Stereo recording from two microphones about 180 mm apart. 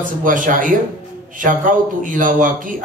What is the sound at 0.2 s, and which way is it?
A man's voice, 50° right (ahead or behind).